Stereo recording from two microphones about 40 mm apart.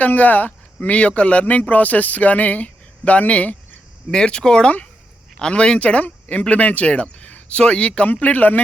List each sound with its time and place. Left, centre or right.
0.0 s speech: left
0.9 s speech: left
4.1 s speech: left